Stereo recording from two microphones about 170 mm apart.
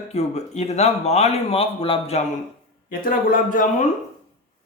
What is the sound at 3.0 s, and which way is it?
Speech, 50° left (ahead or behind).